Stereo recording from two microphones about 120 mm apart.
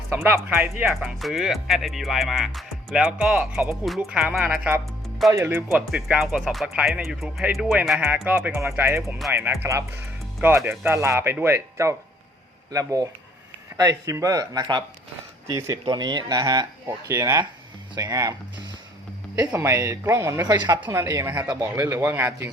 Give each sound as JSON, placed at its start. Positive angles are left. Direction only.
{"t": 0.1, "sound": "speech", "side_deg": -20}
{"t": 0.9, "sound": "speech", "side_deg": 0}
{"t": 3.8, "sound": "speech", "side_deg": 0}
{"t": 4.4, "sound": "speech", "side_deg": -10}
{"t": 5.3, "sound": "speech", "side_deg": -20}
{"t": 5.7, "sound": "speech", "side_deg": -5}
{"t": 8.3, "sound": "speech", "side_deg": -15}
{"t": 9.0, "sound": "speech", "side_deg": 0}
{"t": 9.3, "sound": "speech", "side_deg": -20}
{"t": 19.5, "sound": "speech", "side_deg": -25}
{"t": 20.5, "sound": "speech", "side_deg": -35}
{"t": 20.8, "sound": "speech", "side_deg": -20}
{"t": 21.5, "sound": "speech", "side_deg": -25}